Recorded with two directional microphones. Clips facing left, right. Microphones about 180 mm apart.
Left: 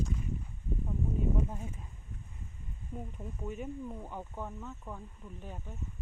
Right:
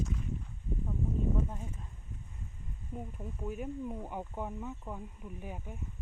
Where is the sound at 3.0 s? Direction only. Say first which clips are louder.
Right 1 dB; centre (ahead or behind).